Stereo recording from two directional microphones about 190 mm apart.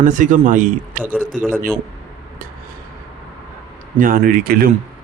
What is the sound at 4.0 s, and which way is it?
Speech, 50° right (ahead or behind).